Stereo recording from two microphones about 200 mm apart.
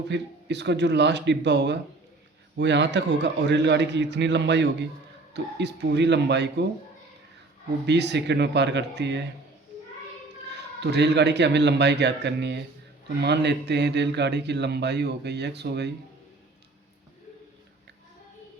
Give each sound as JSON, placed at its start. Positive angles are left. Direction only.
{"t": 0.1, "sound": "speech", "side_deg": -60}
{"t": 7.9, "sound": "speech", "side_deg": -60}
{"t": 10.5, "sound": "speech", "side_deg": -55}